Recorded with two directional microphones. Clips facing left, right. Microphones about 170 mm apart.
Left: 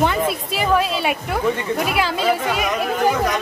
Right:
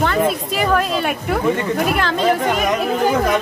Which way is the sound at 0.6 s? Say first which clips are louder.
Even; 5° left (ahead or behind).